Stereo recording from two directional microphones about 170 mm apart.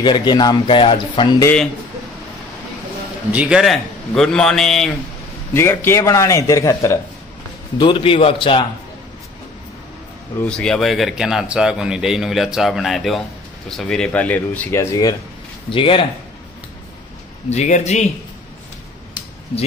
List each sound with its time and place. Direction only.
0.0 s speech: 25° left (ahead or behind)
3.3 s a man's voice: 5° right (ahead or behind)
5.5 s speech: 15° left (ahead or behind)
7.7 s a man's voice: 30° left (ahead or behind)
10.4 s a man's voice: 5° left (ahead or behind)
15.7 s a man's voice: 30° left (ahead or behind)
17.5 s a man's voice: 40° left (ahead or behind)